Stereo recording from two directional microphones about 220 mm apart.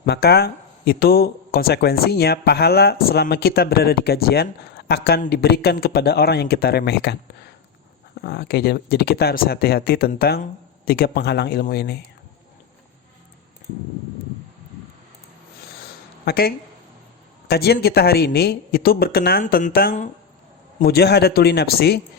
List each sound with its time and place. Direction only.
0.0 s speech: 45° left (ahead or behind)
8.2 s speech: 45° left (ahead or behind)
16.2 s speech: 45° left (ahead or behind)